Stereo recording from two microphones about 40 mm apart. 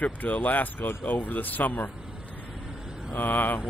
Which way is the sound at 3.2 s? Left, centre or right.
Left.